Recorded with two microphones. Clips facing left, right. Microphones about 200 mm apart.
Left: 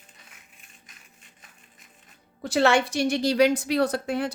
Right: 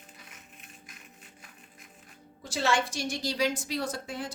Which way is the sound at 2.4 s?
65° left (ahead or behind).